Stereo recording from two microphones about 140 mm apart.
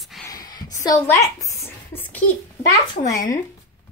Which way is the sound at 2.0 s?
10° left (ahead or behind).